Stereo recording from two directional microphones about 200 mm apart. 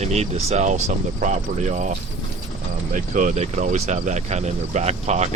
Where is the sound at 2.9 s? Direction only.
40° right (ahead or behind).